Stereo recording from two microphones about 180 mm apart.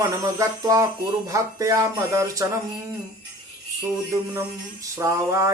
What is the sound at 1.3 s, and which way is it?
Mantra, 20° right (ahead or behind).